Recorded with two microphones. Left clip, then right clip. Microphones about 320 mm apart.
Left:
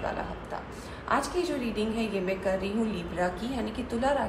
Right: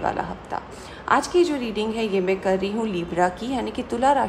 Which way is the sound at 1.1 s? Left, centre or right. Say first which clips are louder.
Right 9 dB; right.